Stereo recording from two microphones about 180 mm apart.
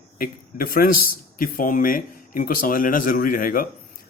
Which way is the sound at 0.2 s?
50° left (ahead or behind).